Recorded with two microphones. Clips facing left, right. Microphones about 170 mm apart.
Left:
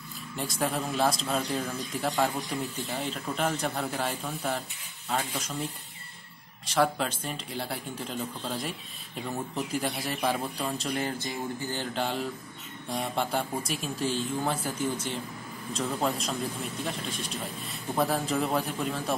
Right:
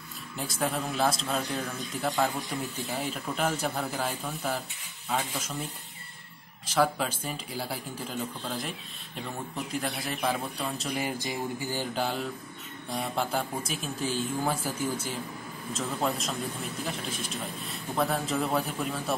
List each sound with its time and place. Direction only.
0.4 s a man's voice: centre (ahead or behind)
10.9 s a sound: 10° right (ahead or behind)
12.9 s a man's voice: centre (ahead or behind)